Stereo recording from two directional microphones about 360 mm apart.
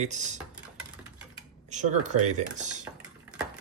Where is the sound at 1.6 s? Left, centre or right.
Centre.